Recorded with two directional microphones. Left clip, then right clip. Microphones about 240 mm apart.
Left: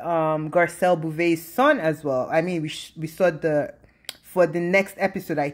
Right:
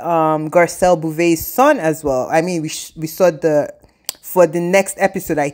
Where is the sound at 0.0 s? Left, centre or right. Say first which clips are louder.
Right 7 dB; right.